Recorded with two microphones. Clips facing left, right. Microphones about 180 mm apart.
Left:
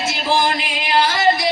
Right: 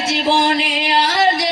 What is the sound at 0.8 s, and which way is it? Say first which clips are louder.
Music: right 2 dB; 35° right (ahead or behind).